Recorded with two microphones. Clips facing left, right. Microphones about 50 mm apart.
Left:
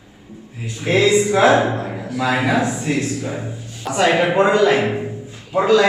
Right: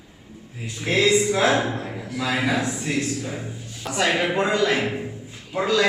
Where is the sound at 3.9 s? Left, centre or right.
Centre.